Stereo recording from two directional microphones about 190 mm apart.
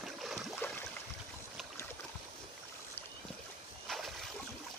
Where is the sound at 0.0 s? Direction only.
Centre (ahead or behind).